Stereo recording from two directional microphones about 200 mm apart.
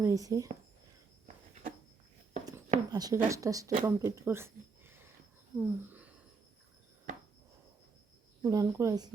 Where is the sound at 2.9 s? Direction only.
15° right (ahead or behind).